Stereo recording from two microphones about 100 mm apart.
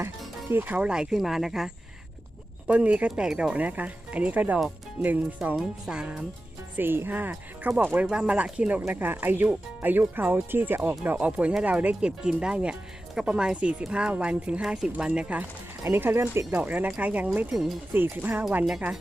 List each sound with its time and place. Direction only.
0.5 s speech: 15° right (ahead or behind)
6.7 s speech: 20° right (ahead or behind)
15.8 s speech: 25° right (ahead or behind)
17.5 s speech: 5° right (ahead or behind)
17.9 s speech: 20° right (ahead or behind)